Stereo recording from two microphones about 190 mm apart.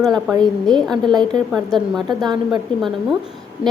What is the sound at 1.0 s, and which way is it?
Speech, 25° right (ahead or behind).